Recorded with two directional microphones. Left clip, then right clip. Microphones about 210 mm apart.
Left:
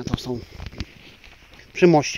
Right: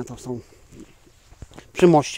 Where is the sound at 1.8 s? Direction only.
5° right (ahead or behind).